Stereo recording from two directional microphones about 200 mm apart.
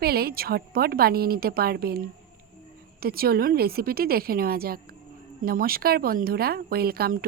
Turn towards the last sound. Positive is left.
turn(degrees=-50)  # may be behind; listen again after turning